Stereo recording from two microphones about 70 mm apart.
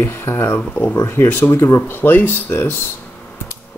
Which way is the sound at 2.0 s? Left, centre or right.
Left.